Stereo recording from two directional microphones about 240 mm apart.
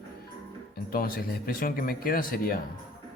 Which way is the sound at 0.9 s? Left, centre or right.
Left.